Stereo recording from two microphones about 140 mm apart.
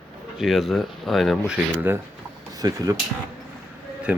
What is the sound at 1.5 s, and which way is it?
Speech, 15° right (ahead or behind).